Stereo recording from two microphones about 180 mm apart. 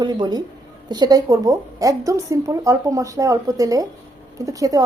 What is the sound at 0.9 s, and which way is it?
A woman's voice, 25° right (ahead or behind).